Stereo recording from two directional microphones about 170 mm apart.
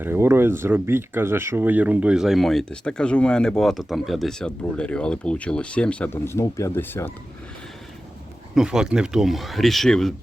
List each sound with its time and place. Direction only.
0.0 s speech: 15° right (ahead or behind); by 7.1 s 10° left (ahead or behind)
8.5 s speech: 5° right (ahead or behind)